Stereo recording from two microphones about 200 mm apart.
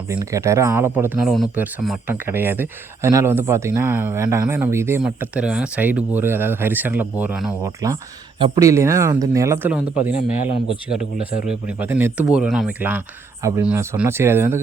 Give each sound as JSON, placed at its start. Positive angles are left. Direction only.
{"t": 0.1, "sound": "speech", "side_deg": -15}
{"t": 10.1, "sound": "a man's voice", "side_deg": 35}
{"t": 10.8, "sound": "speech", "side_deg": -5}